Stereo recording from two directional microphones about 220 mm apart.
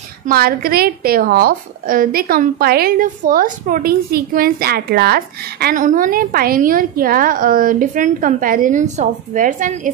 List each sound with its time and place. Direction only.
0.3 s a woman's voice: 45° right (ahead or behind)